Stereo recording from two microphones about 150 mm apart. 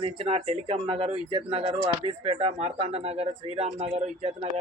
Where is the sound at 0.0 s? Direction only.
40° right (ahead or behind).